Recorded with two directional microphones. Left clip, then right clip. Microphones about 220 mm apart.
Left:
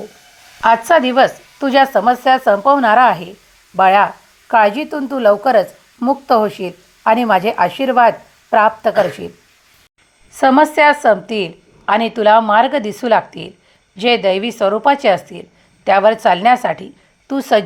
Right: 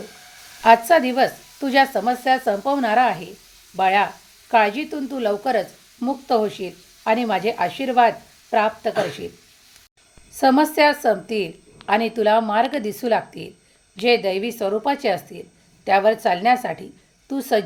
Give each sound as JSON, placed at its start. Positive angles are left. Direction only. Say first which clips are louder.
{"t": 0.6, "sound": "a woman's voice", "louder": "left 3 dB", "side_deg": 15}
{"t": 10.3, "sound": "a woman's voice", "louder": "left 6 dB", "side_deg": 15}